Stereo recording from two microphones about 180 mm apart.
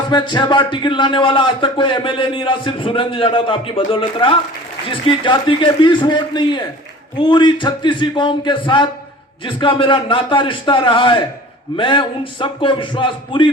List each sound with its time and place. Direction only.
0.1 s speech: 25° left (ahead or behind)